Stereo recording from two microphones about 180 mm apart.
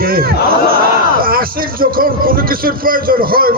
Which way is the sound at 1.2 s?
55° right (ahead or behind).